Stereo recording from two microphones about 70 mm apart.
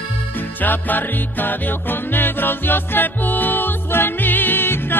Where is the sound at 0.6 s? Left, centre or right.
Left.